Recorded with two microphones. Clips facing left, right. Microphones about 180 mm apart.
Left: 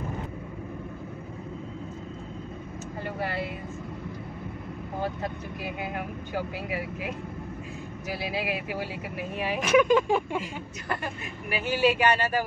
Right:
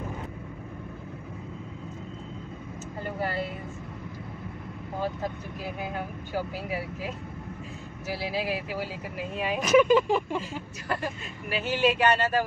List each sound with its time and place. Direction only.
8.2 s speech: 15° left (ahead or behind)
9.4 s speech: 5° left (ahead or behind)
11.4 s speech: 10° left (ahead or behind)